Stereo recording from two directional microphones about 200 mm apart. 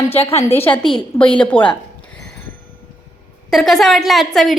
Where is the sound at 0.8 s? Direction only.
5° left (ahead or behind).